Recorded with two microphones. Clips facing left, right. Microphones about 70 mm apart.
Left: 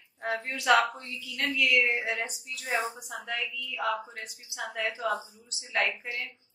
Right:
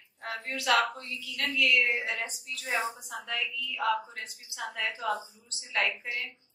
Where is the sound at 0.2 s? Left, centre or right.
Left.